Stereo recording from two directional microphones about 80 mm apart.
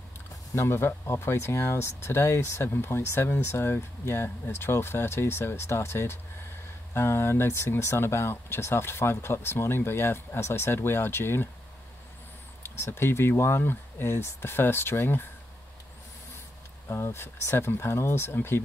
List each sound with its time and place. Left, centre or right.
0.6 s speech: left
12.6 s speech: left
16.9 s speech: left